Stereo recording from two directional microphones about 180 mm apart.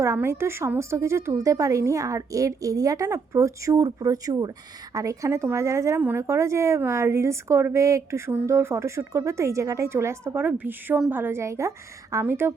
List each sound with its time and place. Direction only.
0.0 s speech: 15° right (ahead or behind)